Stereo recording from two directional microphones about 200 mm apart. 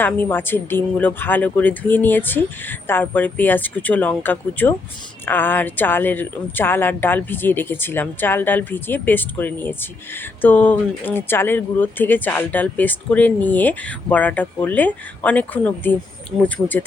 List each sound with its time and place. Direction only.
0.0 s speech: 10° left (ahead or behind)